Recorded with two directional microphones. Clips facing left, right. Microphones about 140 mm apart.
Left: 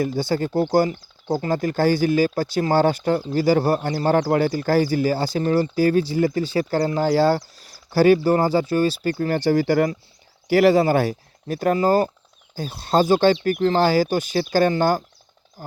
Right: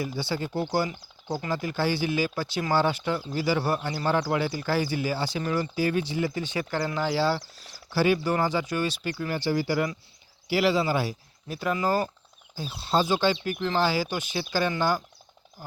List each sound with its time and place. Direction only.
0.0 s speech: 45° left (ahead or behind)
9.1 s speech: 50° left (ahead or behind)